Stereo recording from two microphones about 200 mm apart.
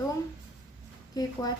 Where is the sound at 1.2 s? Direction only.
15° left (ahead or behind).